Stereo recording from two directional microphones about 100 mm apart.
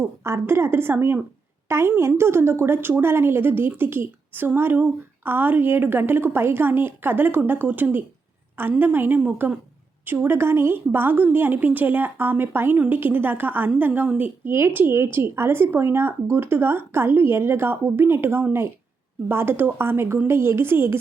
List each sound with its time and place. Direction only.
0.0 s a woman's voice: 25° right (ahead or behind)